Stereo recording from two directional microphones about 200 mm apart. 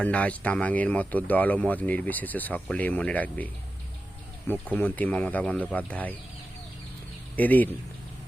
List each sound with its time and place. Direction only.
0.0 s speech: 5° left (ahead or behind)
4.7 s speech: 10° left (ahead or behind)
7.3 s speech: 10° left (ahead or behind)